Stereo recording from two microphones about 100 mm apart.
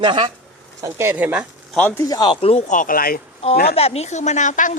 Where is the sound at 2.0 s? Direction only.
40° left (ahead or behind).